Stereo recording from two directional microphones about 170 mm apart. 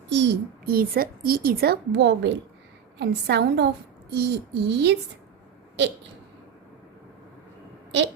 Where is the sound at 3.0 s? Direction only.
75° right (ahead or behind).